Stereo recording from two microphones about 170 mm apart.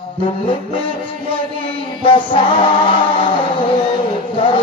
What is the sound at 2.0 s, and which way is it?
Music, 30° left (ahead or behind).